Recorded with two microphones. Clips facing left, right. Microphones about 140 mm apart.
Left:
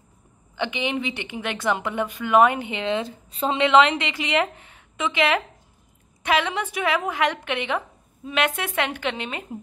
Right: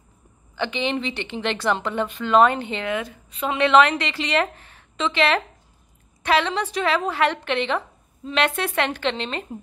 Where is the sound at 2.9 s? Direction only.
30° left (ahead or behind).